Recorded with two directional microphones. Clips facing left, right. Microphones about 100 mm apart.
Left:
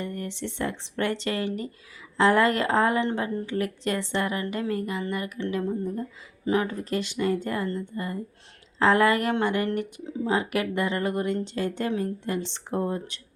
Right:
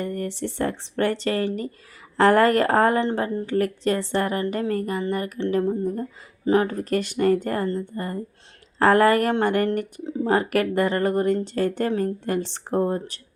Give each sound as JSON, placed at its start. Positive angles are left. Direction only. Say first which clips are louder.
{"t": 0.0, "sound": "speech", "louder": "right 5 dB", "side_deg": -45}
{"t": 3.0, "sound": "a woman's voice", "louder": "right 3 dB", "side_deg": -35}
{"t": 4.7, "sound": "a woman's voice", "louder": "right 4 dB", "side_deg": -45}
{"t": 7.7, "sound": "a woman's voice", "louder": "right 4 dB", "side_deg": -35}
{"t": 8.8, "sound": "speech", "louder": "right 4 dB", "side_deg": -45}
{"t": 10.2, "sound": "speech", "louder": "right 5 dB", "side_deg": -50}